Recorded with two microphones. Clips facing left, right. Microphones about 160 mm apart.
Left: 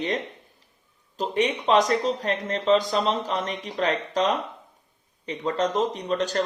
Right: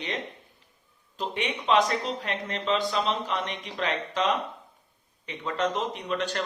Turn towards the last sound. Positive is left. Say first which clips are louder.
# left 4 dB
turn(degrees=40)  # may be behind; listen again after turning